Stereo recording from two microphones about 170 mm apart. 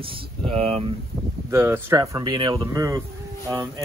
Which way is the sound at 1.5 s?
15° right (ahead or behind).